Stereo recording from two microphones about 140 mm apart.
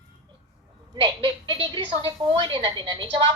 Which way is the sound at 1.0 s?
35° right (ahead or behind).